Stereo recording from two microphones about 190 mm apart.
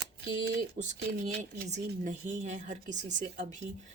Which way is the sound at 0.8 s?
40° right (ahead or behind).